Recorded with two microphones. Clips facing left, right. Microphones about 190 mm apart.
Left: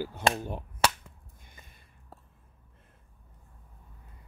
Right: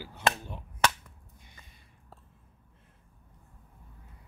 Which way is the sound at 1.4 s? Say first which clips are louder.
Left 3 dB; 50° left (ahead or behind).